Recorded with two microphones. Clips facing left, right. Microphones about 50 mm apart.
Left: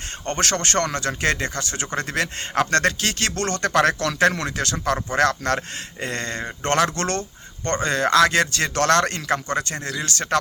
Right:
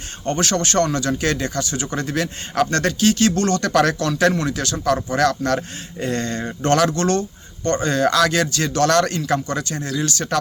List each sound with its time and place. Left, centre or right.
0.3 s speech: left